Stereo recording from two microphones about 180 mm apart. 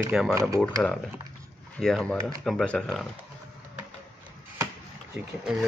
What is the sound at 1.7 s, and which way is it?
Speech, 5° left (ahead or behind).